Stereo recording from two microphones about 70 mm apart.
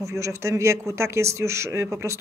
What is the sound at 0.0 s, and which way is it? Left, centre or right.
Speech, right.